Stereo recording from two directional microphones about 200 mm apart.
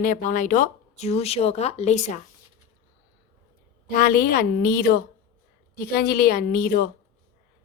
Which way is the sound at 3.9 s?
45° left (ahead or behind).